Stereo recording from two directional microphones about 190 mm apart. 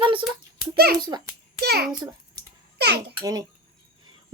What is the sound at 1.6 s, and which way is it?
A child's voice, 55° right (ahead or behind).